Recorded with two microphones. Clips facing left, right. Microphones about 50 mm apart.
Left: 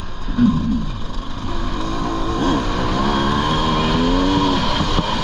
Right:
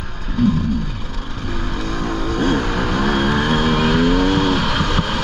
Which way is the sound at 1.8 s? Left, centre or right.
Right.